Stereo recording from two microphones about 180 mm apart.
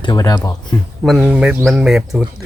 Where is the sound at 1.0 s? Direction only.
Centre (ahead or behind).